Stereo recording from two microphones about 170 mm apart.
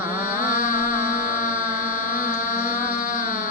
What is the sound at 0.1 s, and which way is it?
Music, 55° left (ahead or behind).